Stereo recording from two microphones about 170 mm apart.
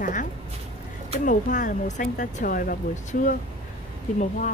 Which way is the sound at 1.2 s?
50° left (ahead or behind).